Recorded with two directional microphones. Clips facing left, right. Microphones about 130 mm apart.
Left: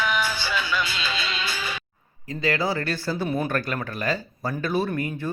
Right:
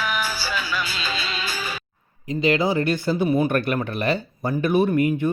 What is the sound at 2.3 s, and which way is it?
Speech, 20° right (ahead or behind).